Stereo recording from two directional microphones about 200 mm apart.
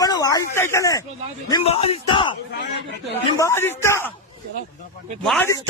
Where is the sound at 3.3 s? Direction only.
15° left (ahead or behind).